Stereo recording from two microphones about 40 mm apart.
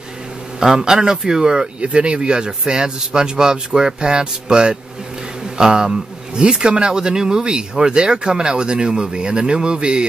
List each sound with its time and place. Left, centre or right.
0.6 s speech: centre
1.8 s speech: right